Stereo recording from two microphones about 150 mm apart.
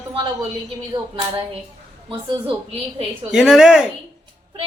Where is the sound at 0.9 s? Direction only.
35° right (ahead or behind).